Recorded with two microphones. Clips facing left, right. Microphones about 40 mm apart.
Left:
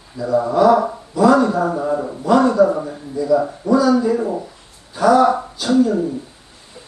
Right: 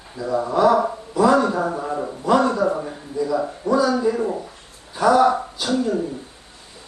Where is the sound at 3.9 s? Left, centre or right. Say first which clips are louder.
Left 3 dB; centre.